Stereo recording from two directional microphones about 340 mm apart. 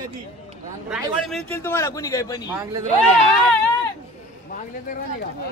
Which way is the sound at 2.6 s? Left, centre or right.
Centre.